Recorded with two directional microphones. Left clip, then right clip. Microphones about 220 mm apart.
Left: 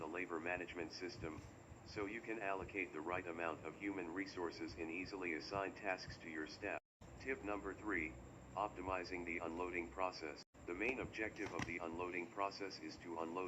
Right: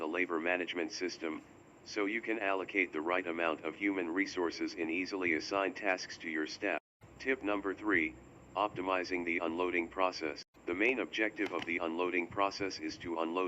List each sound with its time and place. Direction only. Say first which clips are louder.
0.0 s speech: right 11 dB; 40° right (ahead or behind)